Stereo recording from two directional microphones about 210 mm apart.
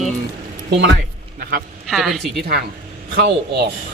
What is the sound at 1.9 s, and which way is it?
Speech, centre (ahead or behind).